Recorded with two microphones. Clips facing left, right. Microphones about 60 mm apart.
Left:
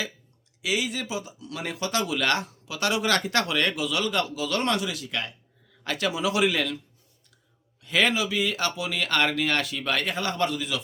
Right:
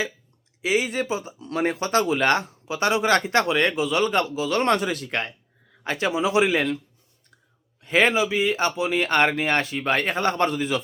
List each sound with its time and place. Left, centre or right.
0.6 s speech: right
5.8 s speech: right
7.8 s speech: right